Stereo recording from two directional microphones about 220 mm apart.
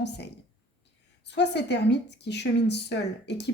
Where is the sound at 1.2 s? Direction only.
50° left (ahead or behind).